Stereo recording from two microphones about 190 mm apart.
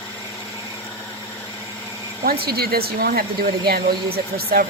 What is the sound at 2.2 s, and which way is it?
Speech, 55° right (ahead or behind).